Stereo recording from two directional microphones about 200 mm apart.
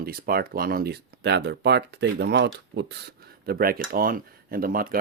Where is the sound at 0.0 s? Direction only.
50° right (ahead or behind).